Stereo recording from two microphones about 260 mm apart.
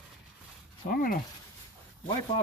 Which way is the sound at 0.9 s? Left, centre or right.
Left.